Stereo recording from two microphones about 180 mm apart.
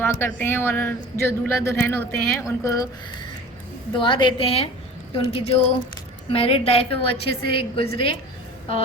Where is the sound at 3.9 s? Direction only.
25° left (ahead or behind).